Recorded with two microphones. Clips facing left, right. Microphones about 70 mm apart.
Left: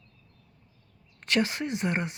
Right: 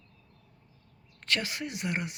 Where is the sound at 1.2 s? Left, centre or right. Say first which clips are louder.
Left 6 dB; left.